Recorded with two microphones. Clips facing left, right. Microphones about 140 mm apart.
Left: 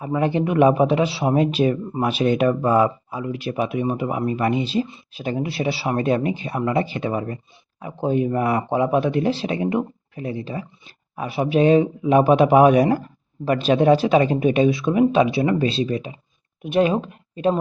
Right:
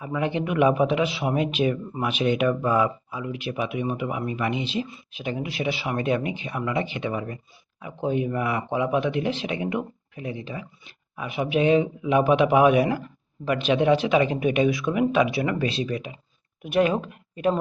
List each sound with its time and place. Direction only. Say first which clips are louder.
0.0 s speech: left 5 dB; 35° left (ahead or behind)